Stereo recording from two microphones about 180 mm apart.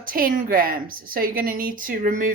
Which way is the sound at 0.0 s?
50° right (ahead or behind).